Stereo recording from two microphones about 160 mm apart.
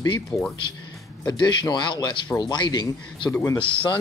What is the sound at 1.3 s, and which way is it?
Speech, 25° left (ahead or behind).